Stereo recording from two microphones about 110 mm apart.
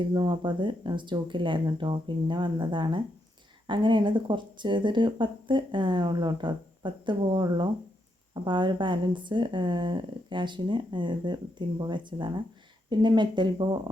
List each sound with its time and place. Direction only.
0.1 s speech: 45° right (ahead or behind)